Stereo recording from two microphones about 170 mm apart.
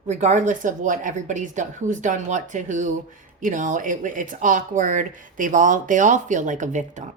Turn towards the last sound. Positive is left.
turn(degrees=-45)  # may be behind; listen again after turning